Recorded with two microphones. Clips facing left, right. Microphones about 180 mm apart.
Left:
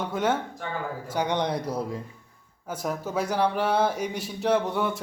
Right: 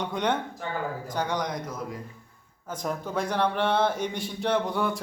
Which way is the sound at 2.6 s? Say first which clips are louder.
Left 1 dB; 5° left (ahead or behind).